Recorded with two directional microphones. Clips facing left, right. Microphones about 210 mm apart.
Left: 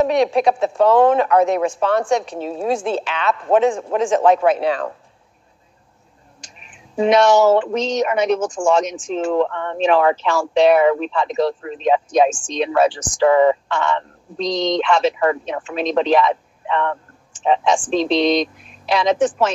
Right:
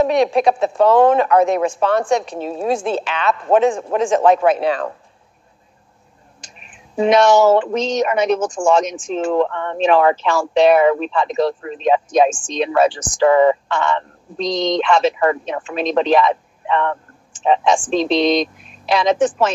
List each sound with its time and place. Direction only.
0.1 s speech: 45° right (ahead or behind)
7.1 s speech: 45° right (ahead or behind)